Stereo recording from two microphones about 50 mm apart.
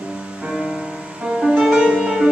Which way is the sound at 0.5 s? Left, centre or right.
Centre.